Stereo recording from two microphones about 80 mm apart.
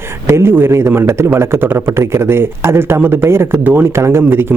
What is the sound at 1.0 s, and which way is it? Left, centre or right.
Speech, right.